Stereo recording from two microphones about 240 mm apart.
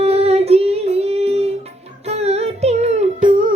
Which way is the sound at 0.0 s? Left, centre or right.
Right.